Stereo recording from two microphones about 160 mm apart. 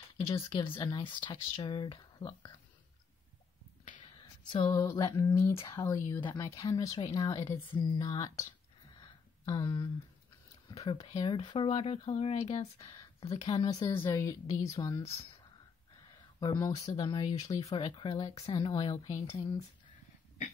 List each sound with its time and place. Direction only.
0.3 s speech: 30° left (ahead or behind)
4.2 s a sound: 30° left (ahead or behind)
4.7 s speech: 20° left (ahead or behind)
7.6 s speech: 35° left (ahead or behind)
8.0 s speech: 20° left (ahead or behind)
8.9 s a sound: 25° left (ahead or behind)
10.8 s speech: 25° left (ahead or behind); by 12.6 s 40° left (ahead or behind)
12.7 s speech: 20° left (ahead or behind)
16.3 s speech: 25° left (ahead or behind)
17.8 s speech: 30° left (ahead or behind)